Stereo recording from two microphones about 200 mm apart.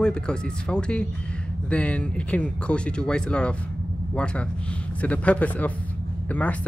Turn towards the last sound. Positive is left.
turn(degrees=5)  # may be behind; listen again after turning